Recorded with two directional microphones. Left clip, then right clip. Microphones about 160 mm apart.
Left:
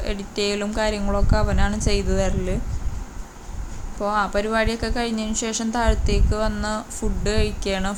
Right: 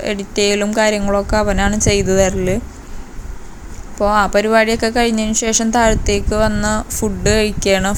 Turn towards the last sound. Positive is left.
turn(degrees=-25)  # may be behind; listen again after turning